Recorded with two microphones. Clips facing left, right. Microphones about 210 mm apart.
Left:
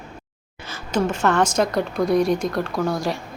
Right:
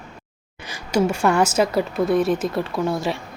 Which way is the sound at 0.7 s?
10° right (ahead or behind).